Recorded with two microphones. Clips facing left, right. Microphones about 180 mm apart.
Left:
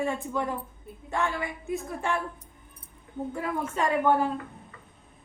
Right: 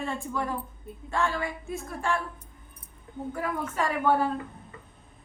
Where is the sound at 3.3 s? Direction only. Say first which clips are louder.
Even; 25° left (ahead or behind).